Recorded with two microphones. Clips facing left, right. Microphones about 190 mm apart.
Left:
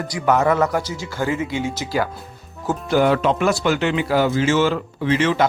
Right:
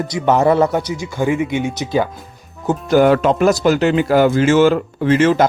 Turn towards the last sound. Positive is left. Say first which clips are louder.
# right 5 dB
turn(degrees=-45)  # may be behind; listen again after turning